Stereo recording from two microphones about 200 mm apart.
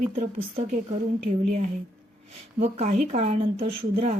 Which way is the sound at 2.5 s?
35° right (ahead or behind).